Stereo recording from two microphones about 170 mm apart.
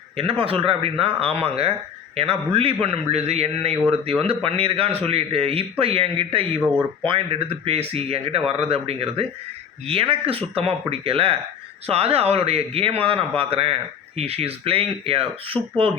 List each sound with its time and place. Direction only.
0.2 s speech: 35° right (ahead or behind)